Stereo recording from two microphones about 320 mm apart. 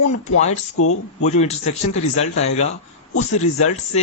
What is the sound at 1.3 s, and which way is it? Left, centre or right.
Speech, left.